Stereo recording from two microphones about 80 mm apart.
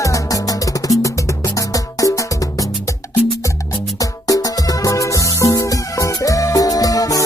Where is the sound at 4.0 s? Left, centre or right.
Left.